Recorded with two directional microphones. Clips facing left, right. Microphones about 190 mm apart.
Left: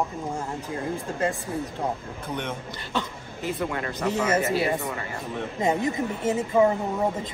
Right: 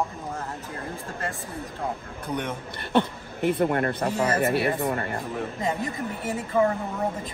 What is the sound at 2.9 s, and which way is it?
Speech, 55° right (ahead or behind).